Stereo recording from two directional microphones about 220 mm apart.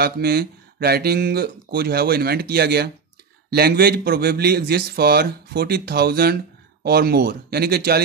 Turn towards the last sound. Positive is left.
turn(degrees=-45)  # may be behind; listen again after turning